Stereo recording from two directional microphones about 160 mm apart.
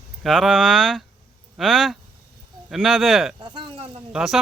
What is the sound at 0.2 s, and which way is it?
Speech, centre (ahead or behind).